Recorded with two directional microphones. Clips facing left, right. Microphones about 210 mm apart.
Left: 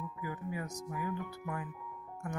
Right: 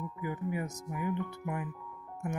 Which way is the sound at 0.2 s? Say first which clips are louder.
Right 5 dB; 20° right (ahead or behind).